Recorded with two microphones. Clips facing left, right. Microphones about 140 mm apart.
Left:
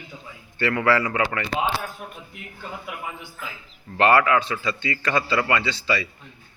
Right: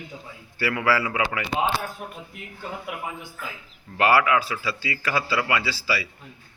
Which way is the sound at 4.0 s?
5° right (ahead or behind).